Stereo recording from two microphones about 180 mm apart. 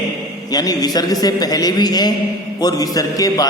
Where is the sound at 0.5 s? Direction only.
20° left (ahead or behind).